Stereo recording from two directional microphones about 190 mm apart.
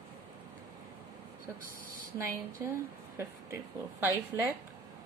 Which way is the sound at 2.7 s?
15° right (ahead or behind).